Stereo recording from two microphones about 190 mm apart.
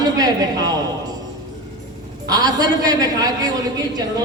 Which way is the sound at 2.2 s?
20° right (ahead or behind).